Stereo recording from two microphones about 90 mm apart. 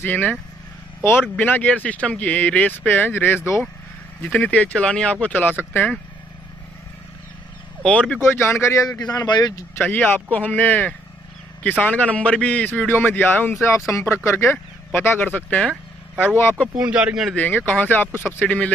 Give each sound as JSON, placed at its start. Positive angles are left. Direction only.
{"t": 0.0, "sound": "speech", "side_deg": 20}
{"t": 7.8, "sound": "speech", "side_deg": 10}
{"t": 8.2, "sound": "a man's voice", "side_deg": 30}
{"t": 8.8, "sound": "speech", "side_deg": 45}
{"t": 9.8, "sound": "a man's voice", "side_deg": 15}
{"t": 16.7, "sound": "a man's voice", "side_deg": -15}
{"t": 17.4, "sound": "a man's voice", "side_deg": 20}